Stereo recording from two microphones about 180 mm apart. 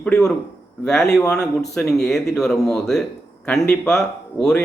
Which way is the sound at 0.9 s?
5° left (ahead or behind).